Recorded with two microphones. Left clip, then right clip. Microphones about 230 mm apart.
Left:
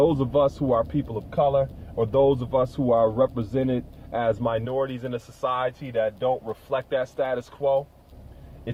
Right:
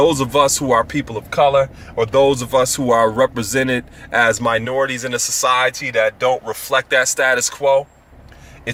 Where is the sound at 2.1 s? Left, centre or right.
Right.